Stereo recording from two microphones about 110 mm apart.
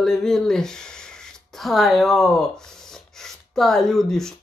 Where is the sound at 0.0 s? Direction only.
5° left (ahead or behind).